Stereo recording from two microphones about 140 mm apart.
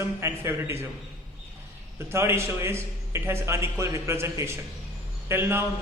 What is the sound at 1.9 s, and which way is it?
A man's voice, 20° right (ahead or behind).